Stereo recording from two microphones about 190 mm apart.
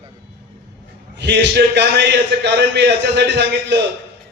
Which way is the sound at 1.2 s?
65° right (ahead or behind).